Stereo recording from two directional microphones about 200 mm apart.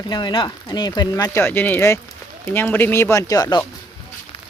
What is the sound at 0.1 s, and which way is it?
Speech, 20° left (ahead or behind).